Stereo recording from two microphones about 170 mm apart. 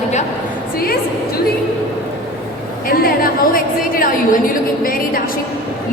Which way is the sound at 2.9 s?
60° left (ahead or behind).